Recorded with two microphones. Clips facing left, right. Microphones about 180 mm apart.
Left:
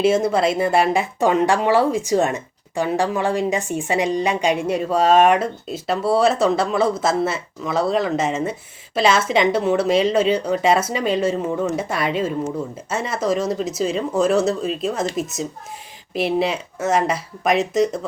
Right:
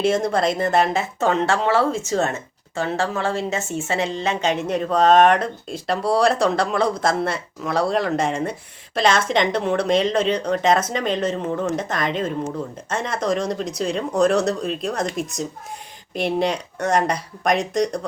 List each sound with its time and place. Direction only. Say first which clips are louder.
0.0 s speech: left 2 dB; 5° left (ahead or behind)